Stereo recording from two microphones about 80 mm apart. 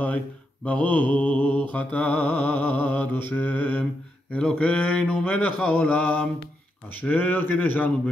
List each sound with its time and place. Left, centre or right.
0.7 s mantra: centre
4.3 s a man's voice: centre
5.7 s mantra: centre